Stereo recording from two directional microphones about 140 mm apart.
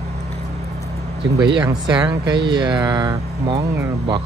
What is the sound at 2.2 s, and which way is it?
Speech, 35° right (ahead or behind).